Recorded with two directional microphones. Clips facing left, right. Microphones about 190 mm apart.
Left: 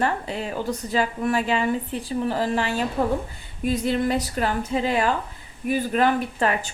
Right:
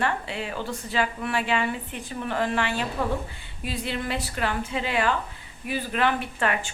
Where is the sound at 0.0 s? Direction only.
40° left (ahead or behind).